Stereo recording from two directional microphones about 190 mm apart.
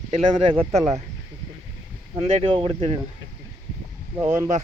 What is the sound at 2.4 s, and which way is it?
Speech, 30° right (ahead or behind).